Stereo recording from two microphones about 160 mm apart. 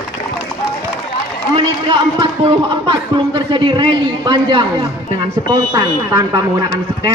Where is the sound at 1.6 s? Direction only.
30° right (ahead or behind).